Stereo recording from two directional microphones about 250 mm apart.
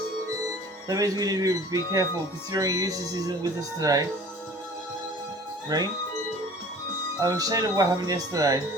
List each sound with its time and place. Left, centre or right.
0.9 s speech: centre
5.6 s speech: centre
7.2 s speech: centre